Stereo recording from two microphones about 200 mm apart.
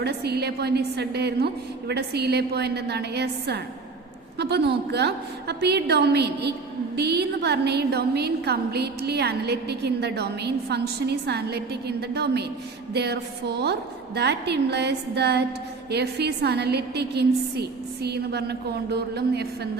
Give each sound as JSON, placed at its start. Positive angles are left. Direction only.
{"t": 0.0, "sound": "a woman's voice", "side_deg": -55}